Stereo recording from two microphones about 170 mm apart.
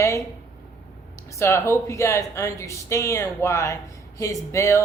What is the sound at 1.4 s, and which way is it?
A woman's voice, 15° left (ahead or behind).